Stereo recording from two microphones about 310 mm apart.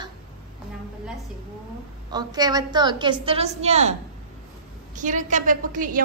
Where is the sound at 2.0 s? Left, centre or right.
Centre.